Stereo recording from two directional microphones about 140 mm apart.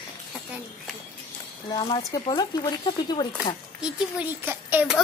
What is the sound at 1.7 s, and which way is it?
Speech, 30° left (ahead or behind).